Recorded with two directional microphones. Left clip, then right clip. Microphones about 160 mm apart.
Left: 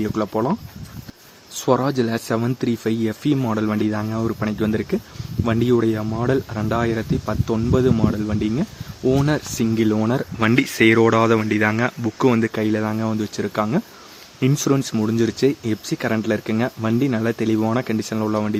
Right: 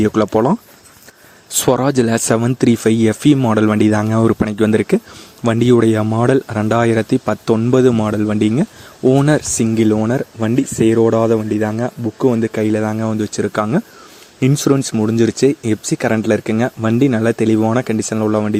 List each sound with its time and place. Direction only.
0.0 s speech: 50° right (ahead or behind)
9.6 s speech: 25° right (ahead or behind)